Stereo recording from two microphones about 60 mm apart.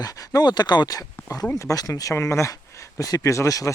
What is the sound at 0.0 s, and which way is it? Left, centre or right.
Speech, left.